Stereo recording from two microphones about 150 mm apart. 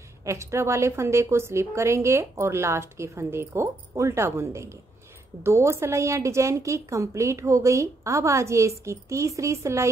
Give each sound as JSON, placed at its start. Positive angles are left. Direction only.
{"t": 0.2, "sound": "a woman's voice", "side_deg": -20}